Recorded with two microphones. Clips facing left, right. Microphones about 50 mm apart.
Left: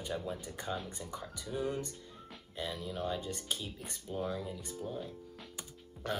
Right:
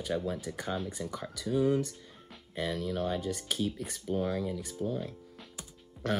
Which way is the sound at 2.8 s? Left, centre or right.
Right.